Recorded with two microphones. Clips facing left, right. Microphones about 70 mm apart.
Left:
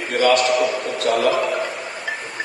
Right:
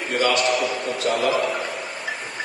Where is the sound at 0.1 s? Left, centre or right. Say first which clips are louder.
Left 4 dB; left.